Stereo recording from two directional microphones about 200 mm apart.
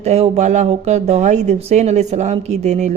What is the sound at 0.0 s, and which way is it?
A woman's voice, 35° right (ahead or behind).